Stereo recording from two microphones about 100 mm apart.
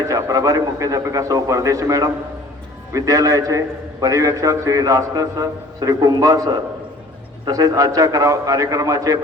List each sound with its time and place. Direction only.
0.1 s a man's voice: 35° right (ahead or behind)